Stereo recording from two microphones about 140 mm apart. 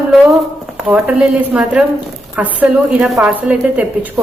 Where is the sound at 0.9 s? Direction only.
10° right (ahead or behind).